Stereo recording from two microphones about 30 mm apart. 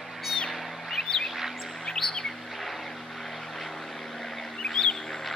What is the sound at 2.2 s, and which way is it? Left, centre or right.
Chirp, centre.